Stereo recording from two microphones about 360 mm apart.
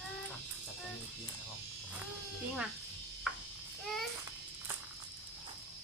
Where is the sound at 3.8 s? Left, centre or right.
Centre.